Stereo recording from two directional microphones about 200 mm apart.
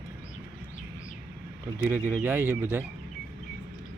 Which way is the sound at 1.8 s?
10° right (ahead or behind).